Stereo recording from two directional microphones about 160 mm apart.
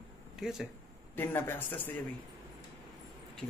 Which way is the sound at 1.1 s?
15° left (ahead or behind).